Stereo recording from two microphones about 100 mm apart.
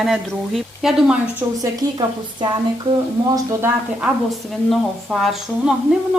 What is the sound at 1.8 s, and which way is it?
Speech, 40° right (ahead or behind).